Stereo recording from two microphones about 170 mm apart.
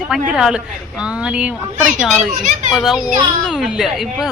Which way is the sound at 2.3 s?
50° right (ahead or behind).